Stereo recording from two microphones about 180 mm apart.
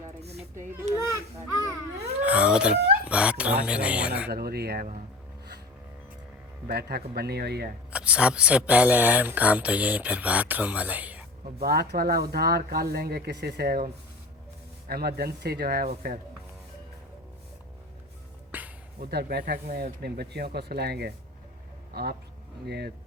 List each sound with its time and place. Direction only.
0.2 s a sound: 35° right (ahead or behind)
2.2 s speech: 5° right (ahead or behind)
4.3 s speech: 60° right (ahead or behind)
6.7 s speech: 60° right (ahead or behind)
7.9 s speech: 5° right (ahead or behind)
11.6 s speech: 60° right (ahead or behind)
18.5 s a sound: 10° right (ahead or behind)
18.9 s speech: 60° right (ahead or behind)